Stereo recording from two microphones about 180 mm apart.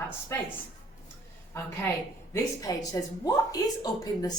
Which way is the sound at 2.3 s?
20° left (ahead or behind).